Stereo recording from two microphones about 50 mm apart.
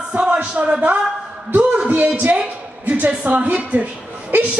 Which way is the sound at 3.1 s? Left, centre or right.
Right.